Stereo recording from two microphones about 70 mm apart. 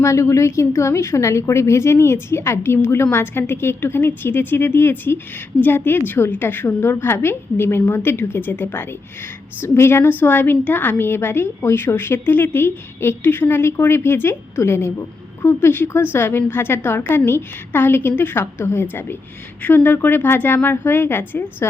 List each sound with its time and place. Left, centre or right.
0.0 s a woman's voice: left